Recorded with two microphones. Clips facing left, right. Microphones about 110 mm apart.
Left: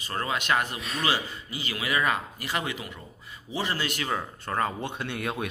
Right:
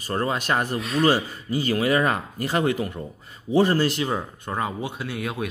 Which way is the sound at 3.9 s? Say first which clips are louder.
Right 4 dB; 25° right (ahead or behind).